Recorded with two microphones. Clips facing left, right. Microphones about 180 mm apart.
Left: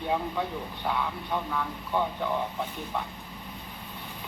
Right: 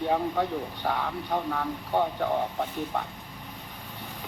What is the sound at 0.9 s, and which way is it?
Speech, 50° right (ahead or behind).